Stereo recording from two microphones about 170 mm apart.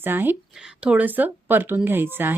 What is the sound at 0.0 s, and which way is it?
Speech, 10° right (ahead or behind).